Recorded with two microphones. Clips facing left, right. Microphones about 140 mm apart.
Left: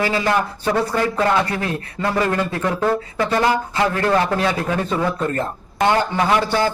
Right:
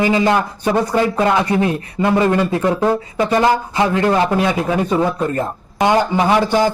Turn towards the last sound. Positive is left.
turn(degrees=-15)  # may be behind; listen again after turning